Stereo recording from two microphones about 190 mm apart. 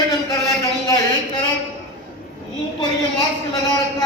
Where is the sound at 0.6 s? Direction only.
20° left (ahead or behind).